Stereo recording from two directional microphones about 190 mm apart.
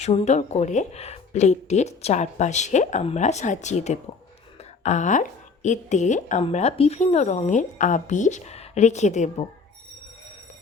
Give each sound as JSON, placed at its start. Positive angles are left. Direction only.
{"t": 0.0, "sound": "a woman's voice", "side_deg": 35}